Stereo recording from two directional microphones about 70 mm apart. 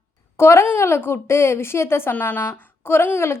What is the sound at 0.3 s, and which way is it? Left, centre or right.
A woman's voice, left.